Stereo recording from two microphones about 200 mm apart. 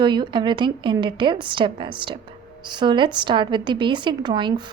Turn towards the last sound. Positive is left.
turn(degrees=-20)  # may be behind; listen again after turning